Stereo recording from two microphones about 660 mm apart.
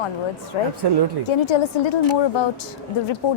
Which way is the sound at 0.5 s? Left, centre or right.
Left.